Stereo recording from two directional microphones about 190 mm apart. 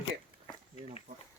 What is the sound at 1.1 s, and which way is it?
Speech, 35° right (ahead or behind).